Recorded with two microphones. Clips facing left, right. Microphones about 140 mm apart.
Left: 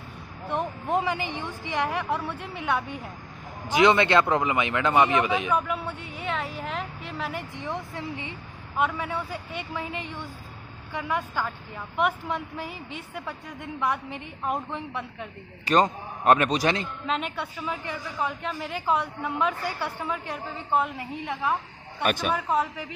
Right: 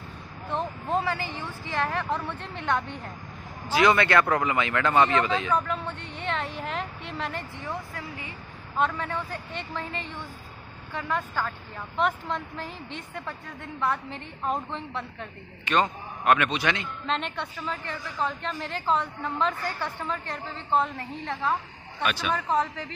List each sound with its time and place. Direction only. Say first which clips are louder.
0.5 s a woman's voice: left 1 dB; 15° left (ahead or behind)
3.6 s a woman's voice: left 2 dB; 20° left (ahead or behind); by 7.4 s 5° left (ahead or behind)
7.5 s speech: left 2 dB; 20° left (ahead or behind)
8.7 s a woman's voice: even; 10° left (ahead or behind)
15.6 s a man's voice: left 3 dB; 35° left (ahead or behind)
17.0 s a woman's voice: left 1 dB; 5° left (ahead or behind)
22.0 s speech: left 3 dB; 50° left (ahead or behind)
22.3 s a woman's voice: even; 10° left (ahead or behind)